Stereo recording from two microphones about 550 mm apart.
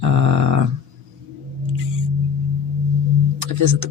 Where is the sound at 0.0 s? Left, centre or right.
Right.